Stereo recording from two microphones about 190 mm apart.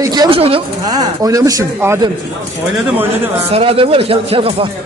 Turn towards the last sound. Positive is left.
turn(degrees=-30)  # may be behind; listen again after turning